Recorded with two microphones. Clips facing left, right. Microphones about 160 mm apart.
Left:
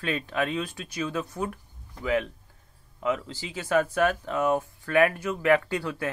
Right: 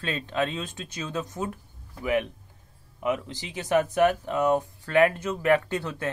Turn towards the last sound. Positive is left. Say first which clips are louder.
# even
turn(degrees=-25)  # may be behind; listen again after turning